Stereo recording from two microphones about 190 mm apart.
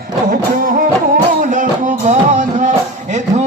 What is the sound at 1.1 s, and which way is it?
Music, 45° right (ahead or behind).